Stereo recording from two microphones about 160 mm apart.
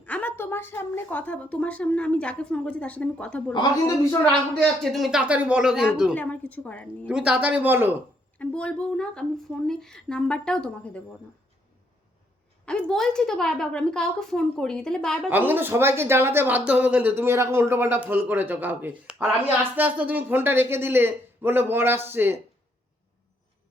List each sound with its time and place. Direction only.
0.0 s a woman's voice: 10° left (ahead or behind)
3.5 s speech: 30° left (ahead or behind)
4.5 s speech: centre (ahead or behind)
6.1 s a woman's voice: 10° left (ahead or behind)
7.1 s speech: 5° right (ahead or behind)
8.4 s speech: 5° left (ahead or behind)
12.6 s speech: 5° left (ahead or behind)
15.3 s speech: 10° right (ahead or behind)